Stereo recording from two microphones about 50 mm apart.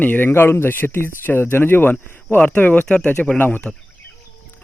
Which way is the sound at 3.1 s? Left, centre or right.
Centre.